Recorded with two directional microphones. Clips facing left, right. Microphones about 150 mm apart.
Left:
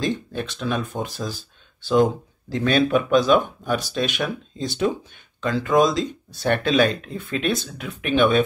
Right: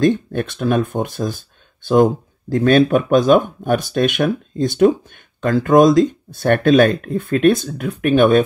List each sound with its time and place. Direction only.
0.0 s speech: 55° right (ahead or behind)